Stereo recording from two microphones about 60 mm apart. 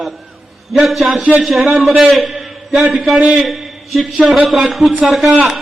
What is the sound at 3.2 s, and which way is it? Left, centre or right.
Speech, centre.